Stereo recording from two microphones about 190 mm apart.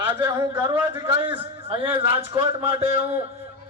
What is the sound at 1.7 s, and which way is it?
A man's voice, 30° right (ahead or behind).